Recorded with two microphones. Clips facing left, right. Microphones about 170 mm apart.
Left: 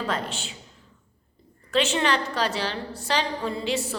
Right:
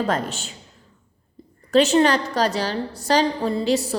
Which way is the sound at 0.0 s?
45° right (ahead or behind).